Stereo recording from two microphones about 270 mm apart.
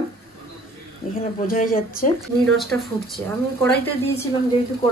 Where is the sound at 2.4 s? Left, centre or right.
Centre.